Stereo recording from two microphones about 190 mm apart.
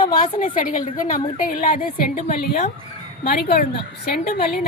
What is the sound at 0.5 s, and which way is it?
A woman's voice, 45° left (ahead or behind).